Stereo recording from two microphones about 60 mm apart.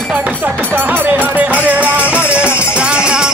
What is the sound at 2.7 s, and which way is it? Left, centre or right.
Music, centre.